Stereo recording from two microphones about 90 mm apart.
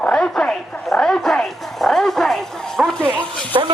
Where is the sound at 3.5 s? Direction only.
55° right (ahead or behind).